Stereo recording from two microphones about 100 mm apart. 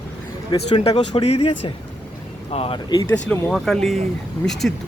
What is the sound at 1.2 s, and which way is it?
Speech, 90° left.